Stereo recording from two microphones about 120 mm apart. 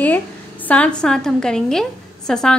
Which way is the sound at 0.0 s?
15° left (ahead or behind).